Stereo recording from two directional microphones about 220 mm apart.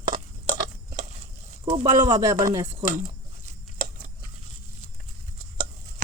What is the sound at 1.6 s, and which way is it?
Speech, 20° right (ahead or behind).